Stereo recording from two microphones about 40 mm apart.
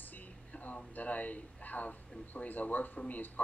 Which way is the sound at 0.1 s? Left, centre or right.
Left.